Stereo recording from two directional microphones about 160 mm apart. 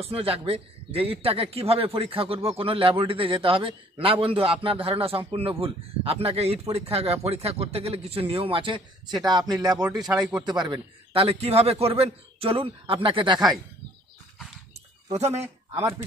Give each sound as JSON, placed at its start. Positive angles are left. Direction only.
{"t": 0.0, "sound": "speech", "side_deg": -35}
{"t": 10.0, "sound": "speech", "side_deg": -5}
{"t": 10.4, "sound": "speech", "side_deg": -25}
{"t": 15.4, "sound": "speech", "side_deg": -20}